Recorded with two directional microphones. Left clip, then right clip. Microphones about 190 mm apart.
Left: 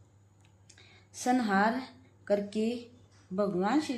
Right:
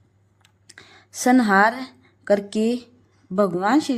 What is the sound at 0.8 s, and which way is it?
A woman's voice, 50° right (ahead or behind).